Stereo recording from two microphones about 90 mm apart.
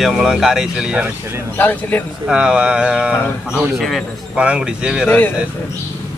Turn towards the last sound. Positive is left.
turn(degrees=20)  # may be behind; listen again after turning